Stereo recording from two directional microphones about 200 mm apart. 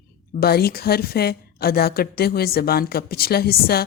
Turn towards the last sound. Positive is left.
turn(degrees=50)  # may be behind; listen again after turning